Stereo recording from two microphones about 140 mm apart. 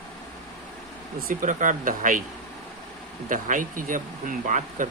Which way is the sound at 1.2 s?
80° right.